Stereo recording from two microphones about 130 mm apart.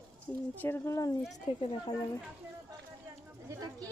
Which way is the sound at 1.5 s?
45° left (ahead or behind).